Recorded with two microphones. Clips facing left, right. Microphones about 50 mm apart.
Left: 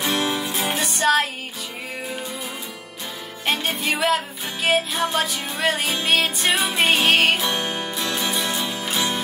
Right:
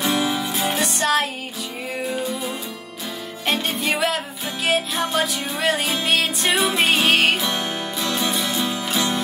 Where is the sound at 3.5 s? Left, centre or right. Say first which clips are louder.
Right 1 dB; centre.